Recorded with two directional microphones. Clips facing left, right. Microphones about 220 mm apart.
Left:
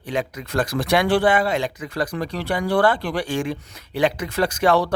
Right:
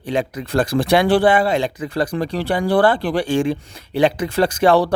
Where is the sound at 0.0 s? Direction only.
30° right (ahead or behind).